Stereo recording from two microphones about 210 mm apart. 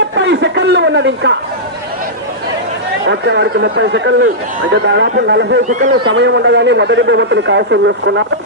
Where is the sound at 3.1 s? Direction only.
55° right (ahead or behind).